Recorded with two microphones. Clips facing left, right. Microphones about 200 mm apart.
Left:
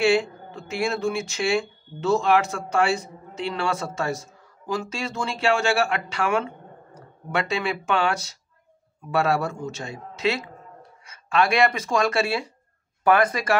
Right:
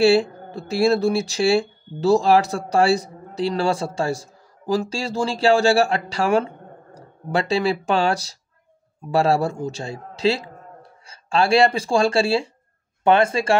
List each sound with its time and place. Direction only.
0.0 s a man's voice: 35° right (ahead or behind)